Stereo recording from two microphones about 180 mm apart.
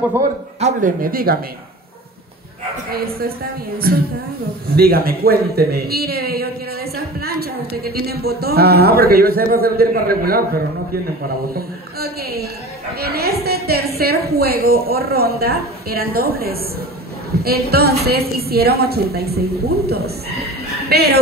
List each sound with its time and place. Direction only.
0.6 s speech: 45° right (ahead or behind)
2.9 s a woman's voice: 55° right (ahead or behind)